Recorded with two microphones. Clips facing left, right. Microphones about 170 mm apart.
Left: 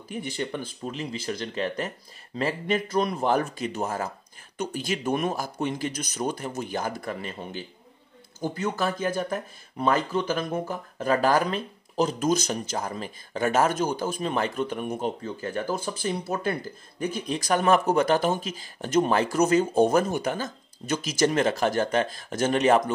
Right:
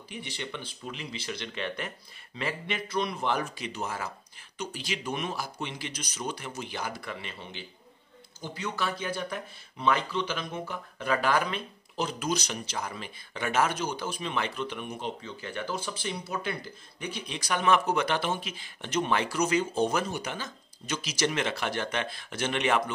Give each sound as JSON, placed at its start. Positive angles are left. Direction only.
{"t": 0.1, "sound": "speech", "side_deg": 45}